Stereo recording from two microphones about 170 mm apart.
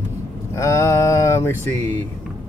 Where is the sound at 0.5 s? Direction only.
15° left (ahead or behind).